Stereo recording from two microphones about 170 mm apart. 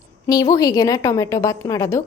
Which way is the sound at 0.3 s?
20° left (ahead or behind).